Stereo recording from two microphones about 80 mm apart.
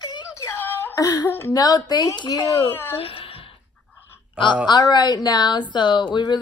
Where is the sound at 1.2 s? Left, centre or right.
Left.